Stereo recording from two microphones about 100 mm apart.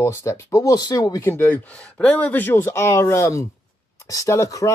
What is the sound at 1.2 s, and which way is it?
Speech, 20° left (ahead or behind).